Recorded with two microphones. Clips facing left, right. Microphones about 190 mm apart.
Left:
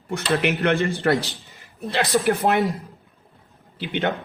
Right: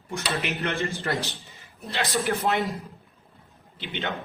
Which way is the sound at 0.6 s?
60° left (ahead or behind).